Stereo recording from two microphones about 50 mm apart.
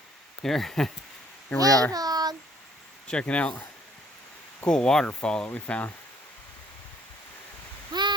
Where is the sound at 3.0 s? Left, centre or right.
Left.